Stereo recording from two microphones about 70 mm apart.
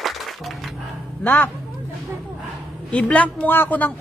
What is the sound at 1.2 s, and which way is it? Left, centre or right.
Speech, left.